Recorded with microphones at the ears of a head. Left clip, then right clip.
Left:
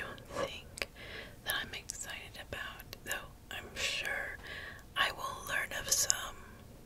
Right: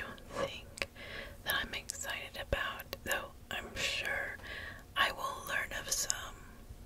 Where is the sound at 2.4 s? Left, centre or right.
Right.